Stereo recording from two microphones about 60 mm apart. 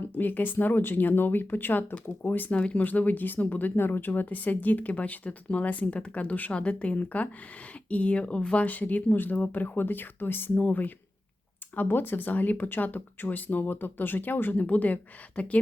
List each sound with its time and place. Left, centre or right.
0.2 s speech: left
2.5 s speech: centre